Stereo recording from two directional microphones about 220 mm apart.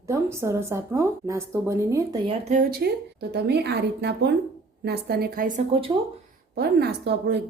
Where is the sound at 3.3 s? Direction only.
50° right (ahead or behind).